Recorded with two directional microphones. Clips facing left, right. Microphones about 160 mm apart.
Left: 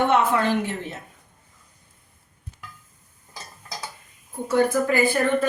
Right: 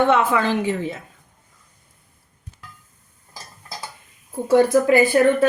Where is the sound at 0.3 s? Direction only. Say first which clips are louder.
Right 2 dB; 90° right.